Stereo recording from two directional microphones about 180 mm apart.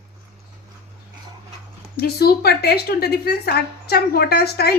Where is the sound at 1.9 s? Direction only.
60° left (ahead or behind).